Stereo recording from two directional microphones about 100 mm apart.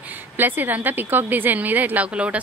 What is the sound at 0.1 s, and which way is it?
A woman's voice, 20° right (ahead or behind).